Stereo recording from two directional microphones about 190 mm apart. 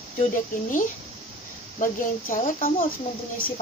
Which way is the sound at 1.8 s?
45° left (ahead or behind).